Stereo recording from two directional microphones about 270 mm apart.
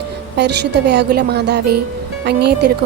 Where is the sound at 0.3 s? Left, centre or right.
Right.